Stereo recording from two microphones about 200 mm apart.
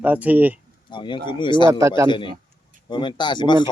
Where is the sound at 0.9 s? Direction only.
25° left (ahead or behind).